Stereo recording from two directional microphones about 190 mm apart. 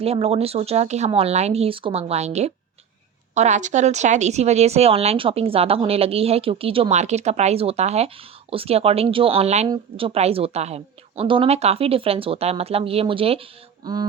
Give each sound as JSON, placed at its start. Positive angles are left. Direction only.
{"t": 0.0, "sound": "a woman's voice", "side_deg": -30}